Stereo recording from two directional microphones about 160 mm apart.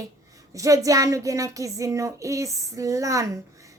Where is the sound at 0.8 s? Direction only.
20° right (ahead or behind).